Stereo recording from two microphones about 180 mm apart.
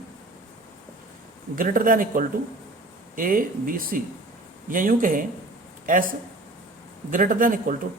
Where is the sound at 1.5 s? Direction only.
50° right (ahead or behind).